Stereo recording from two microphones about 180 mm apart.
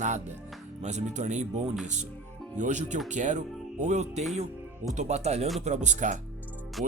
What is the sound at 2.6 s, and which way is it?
Speech, 40° right (ahead or behind).